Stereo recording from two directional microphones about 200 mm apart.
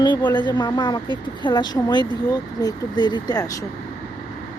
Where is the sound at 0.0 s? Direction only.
20° left (ahead or behind).